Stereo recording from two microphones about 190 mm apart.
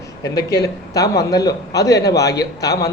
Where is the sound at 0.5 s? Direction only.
60° left (ahead or behind).